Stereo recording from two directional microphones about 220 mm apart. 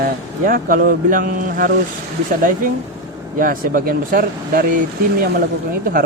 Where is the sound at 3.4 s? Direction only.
40° right (ahead or behind).